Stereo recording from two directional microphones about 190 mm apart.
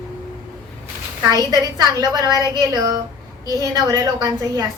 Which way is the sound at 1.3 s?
20° right (ahead or behind).